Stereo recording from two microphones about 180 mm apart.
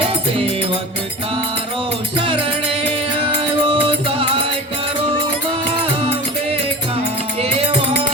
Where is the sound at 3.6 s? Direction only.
30° right (ahead or behind).